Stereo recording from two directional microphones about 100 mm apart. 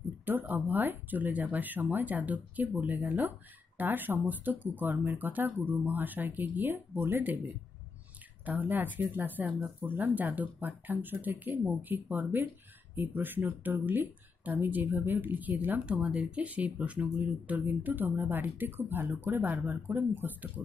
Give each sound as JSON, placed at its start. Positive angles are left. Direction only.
{"t": 0.2, "sound": "speech", "side_deg": -20}